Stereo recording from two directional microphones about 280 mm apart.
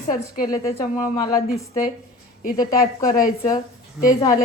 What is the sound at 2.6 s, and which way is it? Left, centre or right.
Speech, centre.